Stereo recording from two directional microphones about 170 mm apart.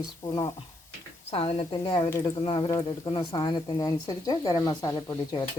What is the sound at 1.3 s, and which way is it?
Speech, 35° left (ahead or behind).